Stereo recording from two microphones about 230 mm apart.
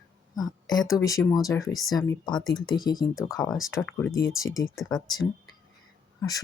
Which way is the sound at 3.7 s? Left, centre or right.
Centre.